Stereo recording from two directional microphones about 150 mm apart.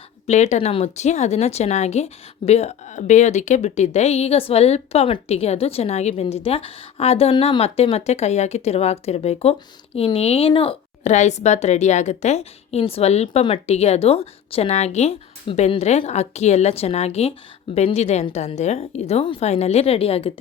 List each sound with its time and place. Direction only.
0.3 s speech: 50° left (ahead or behind)
11.0 s speech: 50° left (ahead or behind)